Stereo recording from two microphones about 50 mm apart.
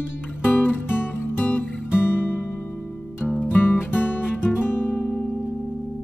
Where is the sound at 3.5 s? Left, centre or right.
Left.